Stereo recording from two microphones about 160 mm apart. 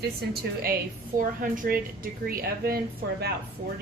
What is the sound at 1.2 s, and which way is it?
A woman's voice, 60° right (ahead or behind).